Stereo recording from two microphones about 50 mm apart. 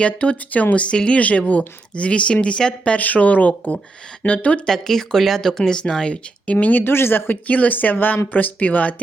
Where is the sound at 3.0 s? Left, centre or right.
Left.